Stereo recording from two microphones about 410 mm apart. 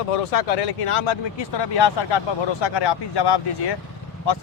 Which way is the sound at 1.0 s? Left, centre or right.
Left.